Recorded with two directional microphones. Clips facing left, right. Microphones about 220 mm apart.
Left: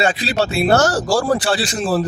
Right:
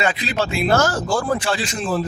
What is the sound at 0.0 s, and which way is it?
Speech, 35° left (ahead or behind).